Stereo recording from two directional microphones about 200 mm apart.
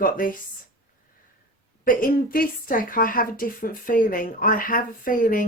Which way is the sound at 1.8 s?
45° left (ahead or behind).